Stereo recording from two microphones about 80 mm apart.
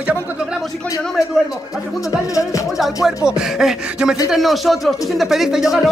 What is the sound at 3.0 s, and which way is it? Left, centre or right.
Rapping, centre.